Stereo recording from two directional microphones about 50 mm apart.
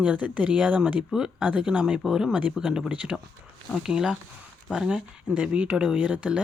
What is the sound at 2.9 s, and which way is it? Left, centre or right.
Speech, right.